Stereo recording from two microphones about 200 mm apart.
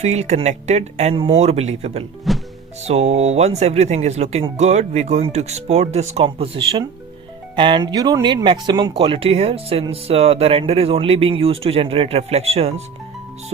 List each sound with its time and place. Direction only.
0.0 s speech: 35° right (ahead or behind)
2.3 s music: centre (ahead or behind)
2.8 s speech: 35° right (ahead or behind)